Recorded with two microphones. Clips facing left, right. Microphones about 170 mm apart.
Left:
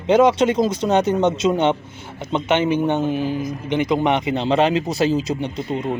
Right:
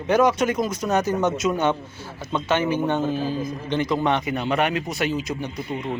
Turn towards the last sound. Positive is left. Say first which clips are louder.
# left 5 dB
turn(degrees=25)  # may be behind; listen again after turning